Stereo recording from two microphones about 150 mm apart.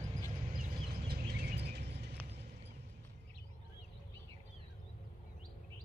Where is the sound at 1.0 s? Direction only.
90° right.